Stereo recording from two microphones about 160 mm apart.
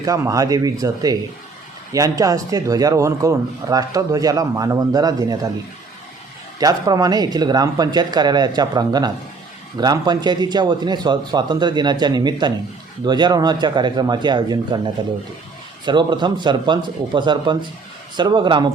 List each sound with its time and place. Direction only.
0.0 s a man's voice: 20° right (ahead or behind)
6.6 s a man's voice: 25° right (ahead or behind)